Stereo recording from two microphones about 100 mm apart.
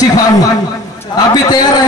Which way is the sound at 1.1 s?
40° left (ahead or behind).